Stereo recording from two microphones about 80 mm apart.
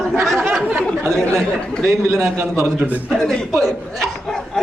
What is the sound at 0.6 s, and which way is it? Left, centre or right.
Speech, right.